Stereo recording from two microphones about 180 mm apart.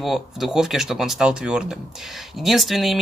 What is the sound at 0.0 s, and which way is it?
Speech, centre (ahead or behind).